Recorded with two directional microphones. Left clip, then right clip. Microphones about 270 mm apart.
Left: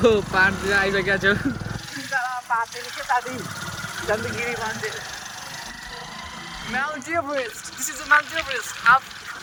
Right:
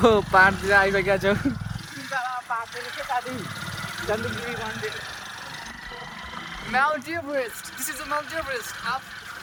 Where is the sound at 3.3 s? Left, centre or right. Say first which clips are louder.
Left 2 dB; left.